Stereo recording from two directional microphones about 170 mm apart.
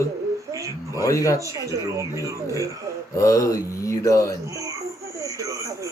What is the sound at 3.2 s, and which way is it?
Speech, 20° left (ahead or behind).